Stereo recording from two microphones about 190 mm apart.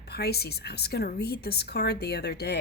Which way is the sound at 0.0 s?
55° left (ahead or behind).